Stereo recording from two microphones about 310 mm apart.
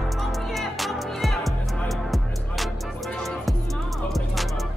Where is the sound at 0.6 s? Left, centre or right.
Centre.